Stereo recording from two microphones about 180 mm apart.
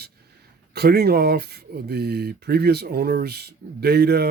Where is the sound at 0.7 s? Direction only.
60° right (ahead or behind).